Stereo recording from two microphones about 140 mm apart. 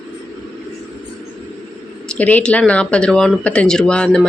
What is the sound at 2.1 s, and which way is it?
Speech, 10° left (ahead or behind).